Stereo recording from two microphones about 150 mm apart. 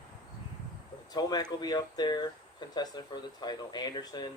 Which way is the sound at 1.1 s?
30° left (ahead or behind).